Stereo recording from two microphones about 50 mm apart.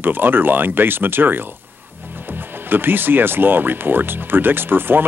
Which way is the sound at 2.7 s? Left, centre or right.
Right.